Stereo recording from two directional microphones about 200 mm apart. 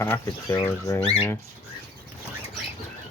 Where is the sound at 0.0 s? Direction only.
15° left (ahead or behind).